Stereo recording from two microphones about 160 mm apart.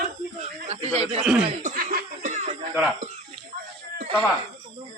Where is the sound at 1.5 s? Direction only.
55° right (ahead or behind).